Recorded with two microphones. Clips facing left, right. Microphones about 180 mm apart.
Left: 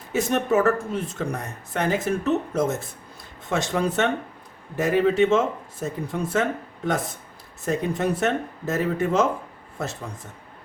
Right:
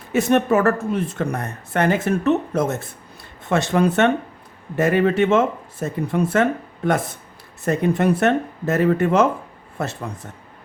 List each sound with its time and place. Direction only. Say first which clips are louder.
0.1 s a man's voice: right 5 dB; 65° right (ahead or behind)